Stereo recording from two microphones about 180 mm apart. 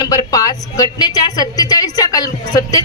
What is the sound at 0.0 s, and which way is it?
A woman's voice, 20° left (ahead or behind).